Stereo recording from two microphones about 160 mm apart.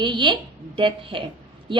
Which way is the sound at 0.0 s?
30° right (ahead or behind).